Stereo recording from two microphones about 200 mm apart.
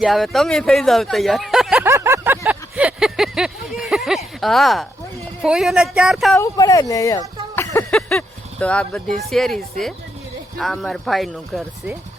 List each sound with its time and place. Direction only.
0.0 s speech: centre (ahead or behind)
1.9 s a sound: 15° right (ahead or behind)
4.4 s speech: centre (ahead or behind)
6.3 s speech: 15° left (ahead or behind)
7.9 s vehicle: 5° left (ahead or behind)
9.1 s speech: centre (ahead or behind)